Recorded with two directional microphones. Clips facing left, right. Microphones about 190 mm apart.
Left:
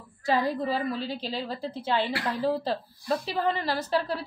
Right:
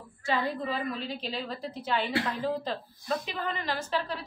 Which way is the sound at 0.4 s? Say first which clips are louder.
Left 4 dB; 40° left (ahead or behind).